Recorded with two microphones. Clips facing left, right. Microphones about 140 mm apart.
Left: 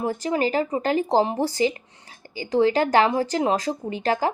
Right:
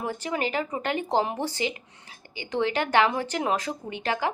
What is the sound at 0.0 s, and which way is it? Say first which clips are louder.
Speech: left 6 dB; 35° left (ahead or behind).